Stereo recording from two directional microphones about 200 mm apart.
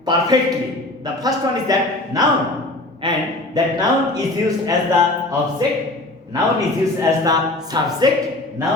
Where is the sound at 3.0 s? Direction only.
25° right (ahead or behind).